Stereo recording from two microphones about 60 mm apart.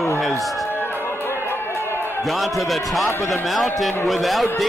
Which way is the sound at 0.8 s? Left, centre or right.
Left.